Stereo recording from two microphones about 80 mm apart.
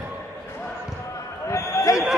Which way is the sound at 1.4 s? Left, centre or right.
Left.